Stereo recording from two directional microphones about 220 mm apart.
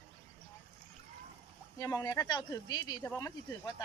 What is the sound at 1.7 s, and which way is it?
Speech, 15° left (ahead or behind).